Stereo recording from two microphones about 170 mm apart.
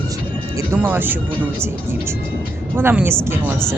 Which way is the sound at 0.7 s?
10° right (ahead or behind).